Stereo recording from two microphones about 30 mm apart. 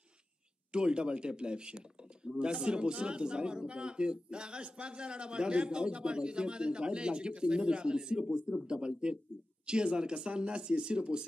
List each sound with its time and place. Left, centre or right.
0.7 s a man's voice: right